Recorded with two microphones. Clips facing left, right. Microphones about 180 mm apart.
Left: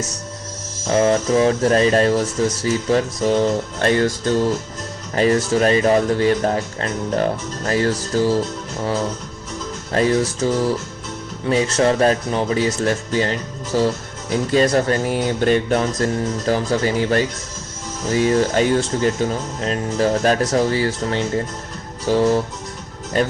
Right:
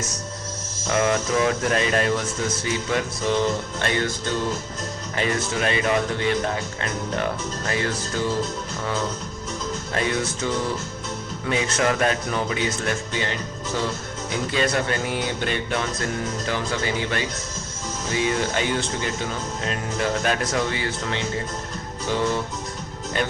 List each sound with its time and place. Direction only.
0.9 s speech: 30° left (ahead or behind)
9.9 s speech: 35° left (ahead or behind)